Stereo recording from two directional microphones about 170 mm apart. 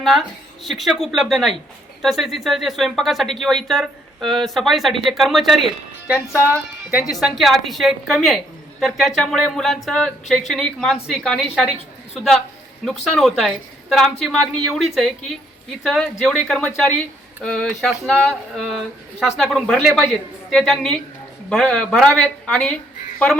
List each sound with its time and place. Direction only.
0.0 s speech: centre (ahead or behind)
6.3 s speech: 15° left (ahead or behind)
7.2 s speech: centre (ahead or behind)
13.1 s speech: centre (ahead or behind)